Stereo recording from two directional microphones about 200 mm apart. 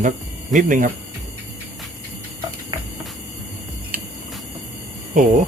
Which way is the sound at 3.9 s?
45° right (ahead or behind).